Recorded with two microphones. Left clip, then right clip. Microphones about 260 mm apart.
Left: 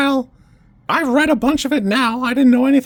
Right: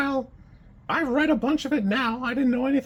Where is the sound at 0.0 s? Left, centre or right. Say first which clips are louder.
Left 9 dB; left.